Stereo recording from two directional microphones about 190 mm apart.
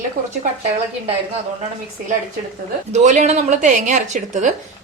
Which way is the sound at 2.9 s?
40° right (ahead or behind).